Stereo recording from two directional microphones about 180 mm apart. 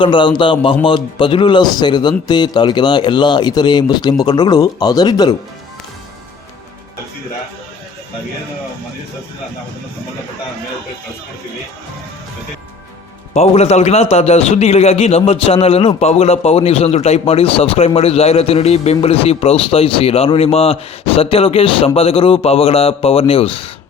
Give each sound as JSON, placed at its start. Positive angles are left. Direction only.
{"t": 0.0, "sound": "speech", "side_deg": 25}
{"t": 13.3, "sound": "a man's voice", "side_deg": 35}